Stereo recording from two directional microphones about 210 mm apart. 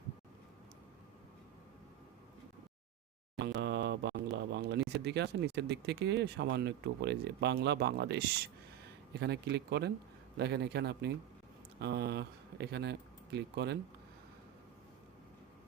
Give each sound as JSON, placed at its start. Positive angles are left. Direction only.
{"t": 3.3, "sound": "a sound", "side_deg": -55}
{"t": 4.9, "sound": "speech", "side_deg": -55}
{"t": 9.2, "sound": "speech", "side_deg": -50}